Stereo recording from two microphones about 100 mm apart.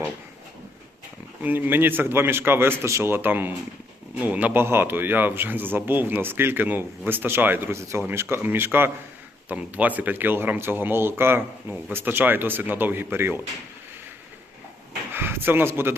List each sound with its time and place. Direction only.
1.4 s speech: 20° right (ahead or behind)
15.1 s speech: 20° right (ahead or behind)